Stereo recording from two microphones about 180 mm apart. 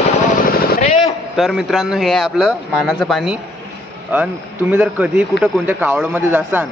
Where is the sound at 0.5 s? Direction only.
50° left (ahead or behind).